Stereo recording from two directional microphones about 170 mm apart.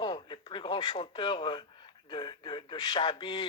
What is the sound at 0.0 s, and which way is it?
Radio, 25° left (ahead or behind).